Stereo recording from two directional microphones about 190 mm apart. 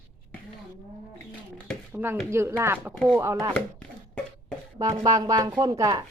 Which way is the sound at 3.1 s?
15° right (ahead or behind).